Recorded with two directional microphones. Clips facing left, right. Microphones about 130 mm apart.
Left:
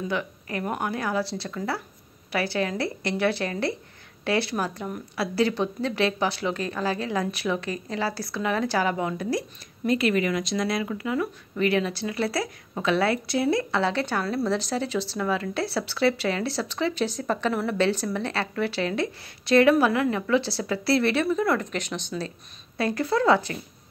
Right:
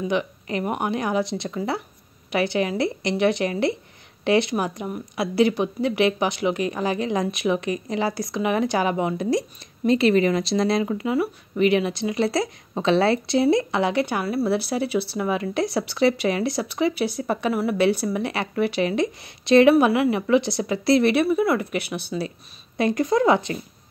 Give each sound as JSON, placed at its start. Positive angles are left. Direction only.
{"t": 0.1, "sound": "a woman's voice", "side_deg": -20}